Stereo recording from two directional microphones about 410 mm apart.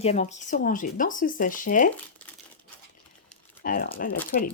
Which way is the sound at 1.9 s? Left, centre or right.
Centre.